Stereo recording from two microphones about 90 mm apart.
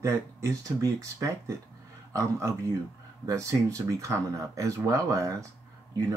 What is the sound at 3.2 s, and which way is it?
Speech, 35° right (ahead or behind).